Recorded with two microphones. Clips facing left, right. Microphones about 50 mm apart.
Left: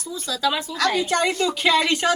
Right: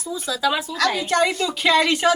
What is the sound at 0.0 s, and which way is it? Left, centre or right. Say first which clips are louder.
A woman's voice: right 1 dB; centre.